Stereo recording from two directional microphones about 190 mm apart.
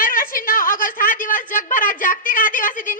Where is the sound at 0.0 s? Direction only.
45° left (ahead or behind).